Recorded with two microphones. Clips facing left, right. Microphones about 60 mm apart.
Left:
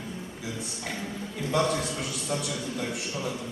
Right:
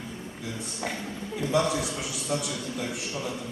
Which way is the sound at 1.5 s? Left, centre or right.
Centre.